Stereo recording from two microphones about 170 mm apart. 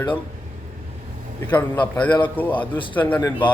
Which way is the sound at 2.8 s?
30° left (ahead or behind).